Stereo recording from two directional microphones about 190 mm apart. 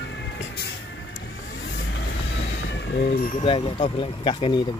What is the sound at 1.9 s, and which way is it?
Vehicle, 70° left (ahead or behind).